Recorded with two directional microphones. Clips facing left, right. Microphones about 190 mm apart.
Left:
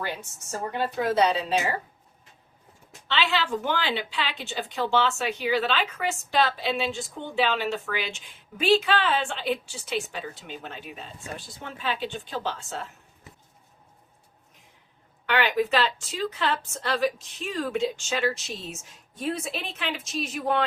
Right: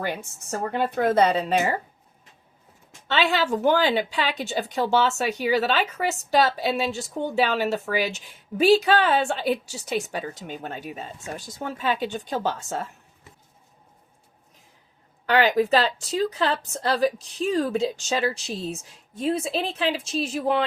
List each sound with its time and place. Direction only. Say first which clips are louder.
0.6 s speech: right 4 dB; 55° right (ahead or behind)
3.1 s speech: right 4 dB; 45° right (ahead or behind)
15.3 s a woman's voice: right 5 dB; 40° right (ahead or behind)